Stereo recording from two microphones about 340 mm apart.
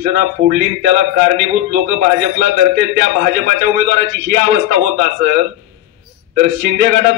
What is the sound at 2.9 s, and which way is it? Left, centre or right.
A man's voice, right.